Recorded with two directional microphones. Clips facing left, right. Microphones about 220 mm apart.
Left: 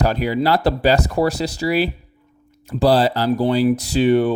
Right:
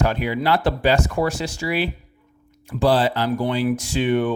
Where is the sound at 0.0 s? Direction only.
35° left (ahead or behind).